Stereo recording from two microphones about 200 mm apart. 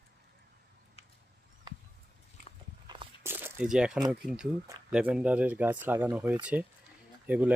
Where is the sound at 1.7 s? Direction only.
20° right (ahead or behind).